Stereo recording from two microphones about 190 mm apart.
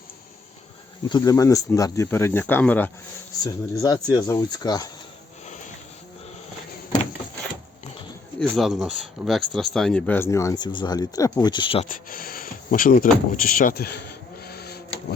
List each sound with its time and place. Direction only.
1.1 s speech: 20° left (ahead or behind)
3.4 s speech: 20° left (ahead or behind)
8.4 s speech: centre (ahead or behind); by 11.9 s 30° left (ahead or behind)
11.9 s speech: 45° left (ahead or behind)
14.4 s printer: 55° left (ahead or behind)